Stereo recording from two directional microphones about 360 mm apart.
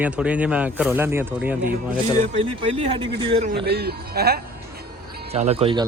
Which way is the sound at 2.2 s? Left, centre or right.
Centre.